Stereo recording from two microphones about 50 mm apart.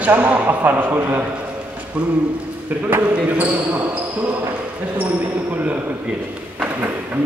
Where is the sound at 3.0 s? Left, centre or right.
Right.